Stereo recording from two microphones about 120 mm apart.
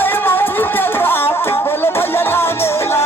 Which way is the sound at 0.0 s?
15° left (ahead or behind).